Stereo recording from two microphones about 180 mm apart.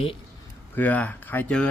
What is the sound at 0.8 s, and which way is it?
Speech, 10° left (ahead or behind).